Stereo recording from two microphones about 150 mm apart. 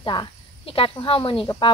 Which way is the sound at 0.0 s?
30° left (ahead or behind).